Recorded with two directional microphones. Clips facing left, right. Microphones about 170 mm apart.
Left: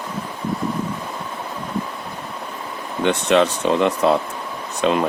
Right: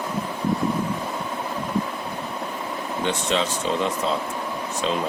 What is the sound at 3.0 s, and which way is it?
Speech, 60° left (ahead or behind).